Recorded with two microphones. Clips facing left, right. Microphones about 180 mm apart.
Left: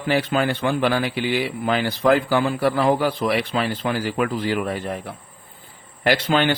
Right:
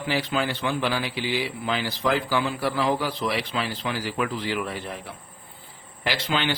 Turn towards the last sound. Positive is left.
turn(degrees=50)  # may be behind; listen again after turning